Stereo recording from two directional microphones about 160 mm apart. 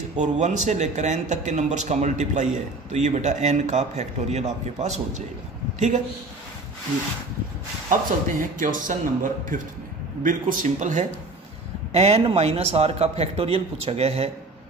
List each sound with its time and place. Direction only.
0.1 s speech: 50° right (ahead or behind)
7.9 s a man's voice: 55° right (ahead or behind); by 14.3 s 40° right (ahead or behind)